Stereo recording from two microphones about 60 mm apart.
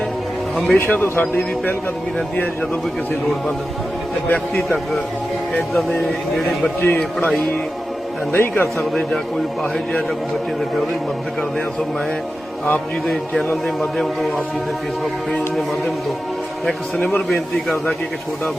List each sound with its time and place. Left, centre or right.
0.5 s a man's voice: centre
0.9 s a man's voice: left
4.3 s a man's voice: left
6.8 s a man's voice: left
8.3 s a man's voice: left
13.1 s a man's voice: centre